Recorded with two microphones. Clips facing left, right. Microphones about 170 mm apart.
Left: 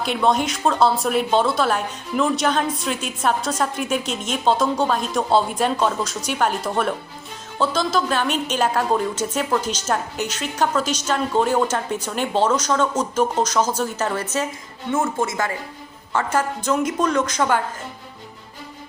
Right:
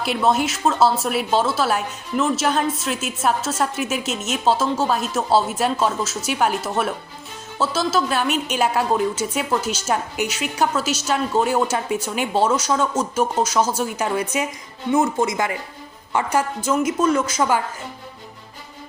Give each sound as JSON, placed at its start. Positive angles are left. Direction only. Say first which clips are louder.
{"t": 0.0, "sound": "a woman's voice", "louder": "even", "side_deg": -5}